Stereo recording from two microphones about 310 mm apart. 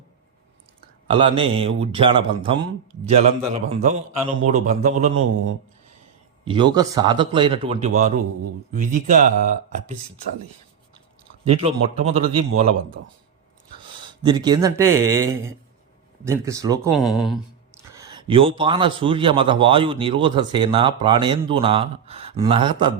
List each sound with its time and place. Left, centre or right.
1.1 s a man's voice: centre
6.4 s a man's voice: centre
11.4 s speech: centre
14.2 s a man's voice: centre
17.0 s a man's voice: centre